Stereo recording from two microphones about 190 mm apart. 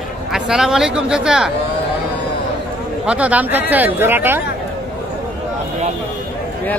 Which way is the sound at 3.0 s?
5° right (ahead or behind).